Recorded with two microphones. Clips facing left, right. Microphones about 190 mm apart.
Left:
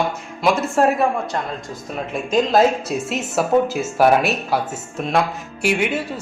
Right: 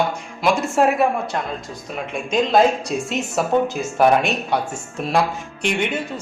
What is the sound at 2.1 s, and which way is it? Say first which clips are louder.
Speech: left 1 dB; centre (ahead or behind).